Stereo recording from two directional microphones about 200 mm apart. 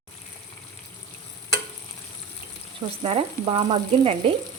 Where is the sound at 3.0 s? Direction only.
30° right (ahead or behind).